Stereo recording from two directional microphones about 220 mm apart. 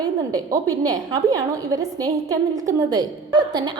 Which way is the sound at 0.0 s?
15° right (ahead or behind).